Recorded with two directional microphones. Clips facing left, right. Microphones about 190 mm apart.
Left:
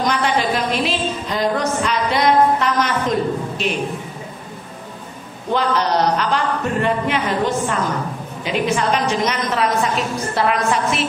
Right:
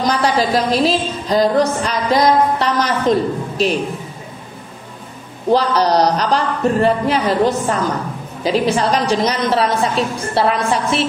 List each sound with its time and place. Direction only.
0.0 s a woman's voice: 35° right (ahead or behind)
5.5 s a woman's voice: 35° right (ahead or behind)